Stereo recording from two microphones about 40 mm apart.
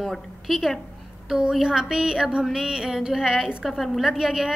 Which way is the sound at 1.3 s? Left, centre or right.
Centre.